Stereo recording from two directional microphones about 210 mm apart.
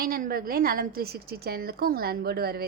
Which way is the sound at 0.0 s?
45° right (ahead or behind).